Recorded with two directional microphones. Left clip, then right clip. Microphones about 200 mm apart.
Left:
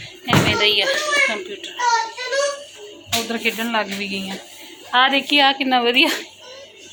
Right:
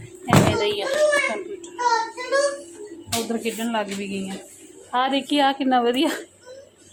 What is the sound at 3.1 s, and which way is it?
A woman's voice, 10° right (ahead or behind).